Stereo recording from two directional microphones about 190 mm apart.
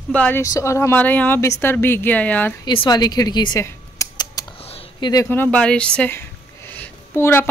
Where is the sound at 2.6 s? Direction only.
25° left (ahead or behind).